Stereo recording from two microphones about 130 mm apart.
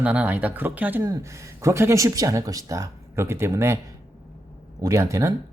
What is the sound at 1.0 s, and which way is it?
Speech, 25° right (ahead or behind).